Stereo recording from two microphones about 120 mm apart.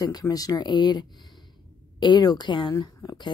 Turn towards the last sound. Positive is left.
turn(degrees=35)  # may be behind; listen again after turning